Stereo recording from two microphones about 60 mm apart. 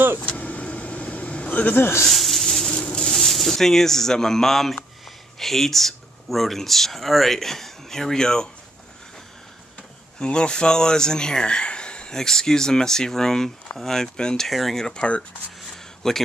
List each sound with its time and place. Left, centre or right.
0.2 s vehicle: left
1.8 s speech: left
2.0 s snake: centre
2.7 s a sound: centre
3.1 s speech: centre
10.2 s speech: centre